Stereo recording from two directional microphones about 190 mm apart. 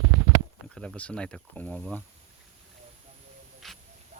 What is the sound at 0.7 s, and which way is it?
Speech, 5° left (ahead or behind).